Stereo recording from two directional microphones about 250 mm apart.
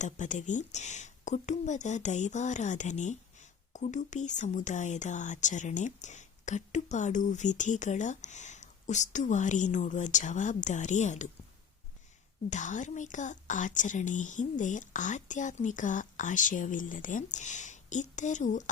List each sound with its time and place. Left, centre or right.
0.0 s speech: left
12.5 s speech: left